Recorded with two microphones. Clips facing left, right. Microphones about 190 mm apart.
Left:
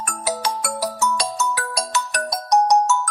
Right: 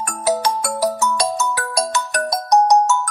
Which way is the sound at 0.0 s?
45° right (ahead or behind).